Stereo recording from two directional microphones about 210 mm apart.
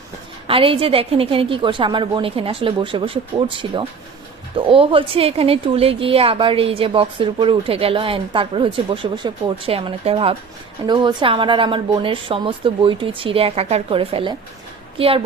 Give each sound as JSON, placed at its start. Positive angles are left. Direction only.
{"t": 0.4, "sound": "a woman's voice", "side_deg": -25}